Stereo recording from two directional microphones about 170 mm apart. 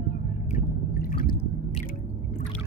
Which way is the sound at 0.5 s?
55° left (ahead or behind).